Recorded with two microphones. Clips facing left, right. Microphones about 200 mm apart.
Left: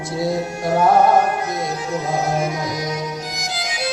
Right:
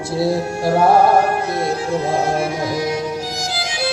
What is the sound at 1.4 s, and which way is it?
Music, 30° right (ahead or behind).